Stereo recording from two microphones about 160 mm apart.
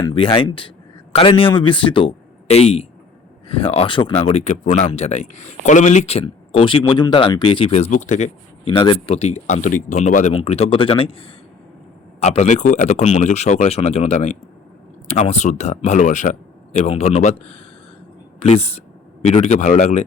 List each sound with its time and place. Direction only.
0.0 s a man's voice: 30° left (ahead or behind); by 8.7 s 45° left (ahead or behind)
8.7 s speech: 30° left (ahead or behind)